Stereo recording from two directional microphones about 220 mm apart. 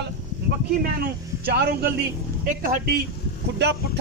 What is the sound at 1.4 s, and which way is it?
A man's voice, 45° right (ahead or behind).